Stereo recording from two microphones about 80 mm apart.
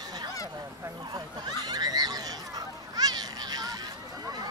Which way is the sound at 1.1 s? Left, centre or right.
Right.